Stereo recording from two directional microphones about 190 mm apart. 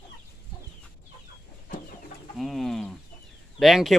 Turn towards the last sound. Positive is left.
turn(degrees=0)  # may be behind; listen again after turning